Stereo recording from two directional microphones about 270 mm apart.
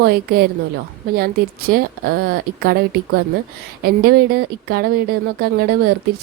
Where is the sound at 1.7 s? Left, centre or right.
Right.